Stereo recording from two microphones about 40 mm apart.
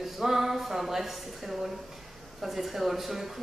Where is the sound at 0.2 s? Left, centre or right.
Centre.